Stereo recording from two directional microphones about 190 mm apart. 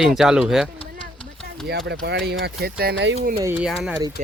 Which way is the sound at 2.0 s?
60° right (ahead or behind).